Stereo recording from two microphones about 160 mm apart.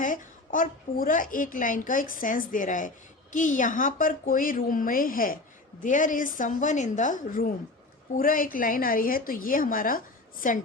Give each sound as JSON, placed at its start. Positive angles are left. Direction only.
{"t": 0.0, "sound": "a woman's voice", "side_deg": 55}